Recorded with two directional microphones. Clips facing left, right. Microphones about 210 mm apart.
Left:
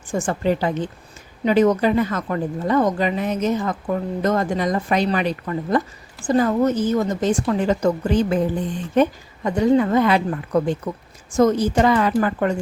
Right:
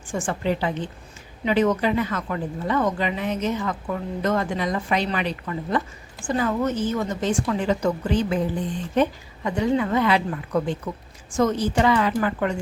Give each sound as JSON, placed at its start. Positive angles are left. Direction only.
{"t": 0.1, "sound": "a woman's voice", "side_deg": 40}